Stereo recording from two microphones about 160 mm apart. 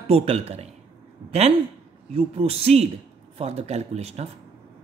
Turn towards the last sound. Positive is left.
turn(degrees=-40)  # may be behind; listen again after turning